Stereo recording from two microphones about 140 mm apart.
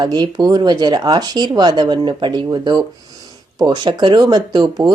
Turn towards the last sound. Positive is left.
turn(degrees=-30)  # may be behind; listen again after turning